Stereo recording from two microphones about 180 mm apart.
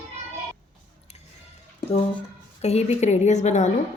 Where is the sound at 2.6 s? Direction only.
35° left (ahead or behind).